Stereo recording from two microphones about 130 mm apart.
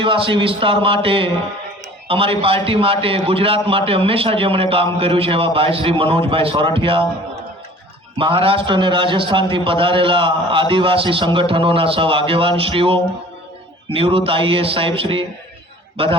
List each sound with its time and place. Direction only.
0.0 s a man's voice: 40° right (ahead or behind)
8.2 s a man's voice: 45° right (ahead or behind)